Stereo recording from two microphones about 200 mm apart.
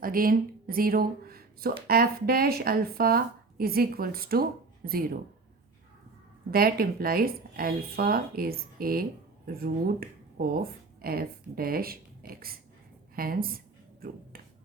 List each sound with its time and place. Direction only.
0.0 s speech: 45° right (ahead or behind)
6.5 s speech: 50° right (ahead or behind)